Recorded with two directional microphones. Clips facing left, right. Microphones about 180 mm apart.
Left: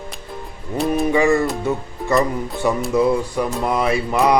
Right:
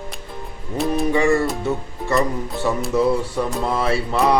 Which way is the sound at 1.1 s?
15° left (ahead or behind).